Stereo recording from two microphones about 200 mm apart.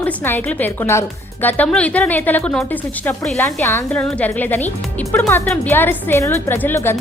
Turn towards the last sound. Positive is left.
turn(degrees=10)  # may be behind; listen again after turning